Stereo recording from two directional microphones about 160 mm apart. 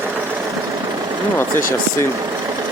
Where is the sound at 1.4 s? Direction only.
15° left (ahead or behind).